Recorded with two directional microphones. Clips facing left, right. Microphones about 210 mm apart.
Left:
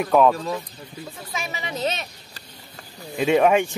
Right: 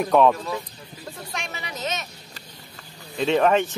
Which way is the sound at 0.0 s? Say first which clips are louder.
Even; 5° left (ahead or behind).